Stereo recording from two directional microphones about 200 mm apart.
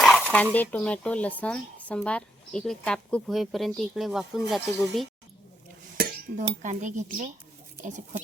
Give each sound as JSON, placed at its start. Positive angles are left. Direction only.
{"t": 0.0, "sound": "a sound", "side_deg": 5}
{"t": 0.5, "sound": "speech", "side_deg": 10}
{"t": 6.0, "sound": "dishes", "side_deg": -45}
{"t": 6.5, "sound": "speech", "side_deg": -40}